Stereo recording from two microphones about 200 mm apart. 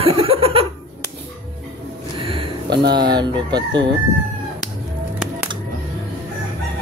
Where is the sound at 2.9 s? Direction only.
20° right (ahead or behind).